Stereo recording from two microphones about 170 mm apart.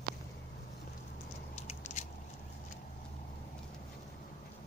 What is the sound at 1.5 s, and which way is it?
Biting, 40° left (ahead or behind).